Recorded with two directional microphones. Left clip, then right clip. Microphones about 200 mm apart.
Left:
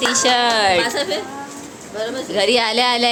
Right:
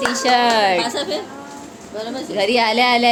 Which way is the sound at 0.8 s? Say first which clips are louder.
Left 2 dB; 25° right (ahead or behind).